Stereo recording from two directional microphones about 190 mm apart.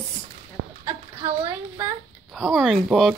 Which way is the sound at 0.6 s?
80° right.